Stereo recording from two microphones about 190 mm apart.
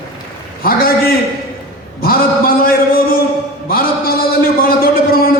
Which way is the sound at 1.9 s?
50° left (ahead or behind).